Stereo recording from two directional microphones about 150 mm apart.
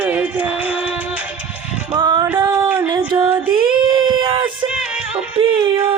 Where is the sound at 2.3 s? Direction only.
15° right (ahead or behind).